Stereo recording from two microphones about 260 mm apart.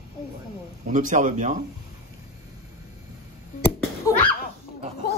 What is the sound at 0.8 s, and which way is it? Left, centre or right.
Speech, right.